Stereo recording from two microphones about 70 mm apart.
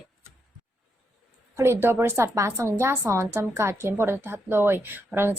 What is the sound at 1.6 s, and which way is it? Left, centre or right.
A woman's voice, right.